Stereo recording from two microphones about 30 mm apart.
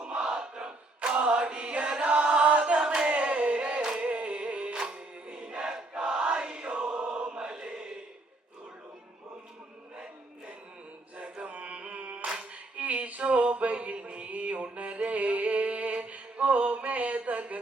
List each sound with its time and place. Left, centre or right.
0.1 s a sound: right
0.5 s battle cry: right
1.1 s chant: right
2.4 s choir: right
2.8 s a sound: right
3.1 s a sound: right
4.0 s music: right
4.7 s music: right
6.3 s choir: right
11.4 s music: right
12.8 s a sound: right
14.3 s music: right
16.0 s mantra: right